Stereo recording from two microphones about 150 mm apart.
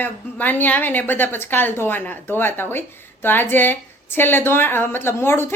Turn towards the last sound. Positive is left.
turn(degrees=15)  # may be behind; listen again after turning